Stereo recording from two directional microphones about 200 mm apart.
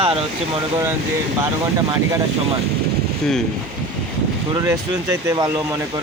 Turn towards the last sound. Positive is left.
turn(degrees=-15)  # may be behind; listen again after turning